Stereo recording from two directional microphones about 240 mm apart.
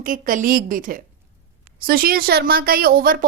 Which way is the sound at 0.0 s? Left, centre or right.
Right.